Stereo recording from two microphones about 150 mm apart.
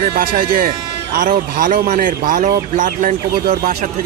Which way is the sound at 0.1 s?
70° right (ahead or behind).